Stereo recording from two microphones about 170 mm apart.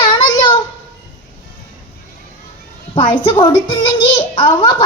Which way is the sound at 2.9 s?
30° left (ahead or behind).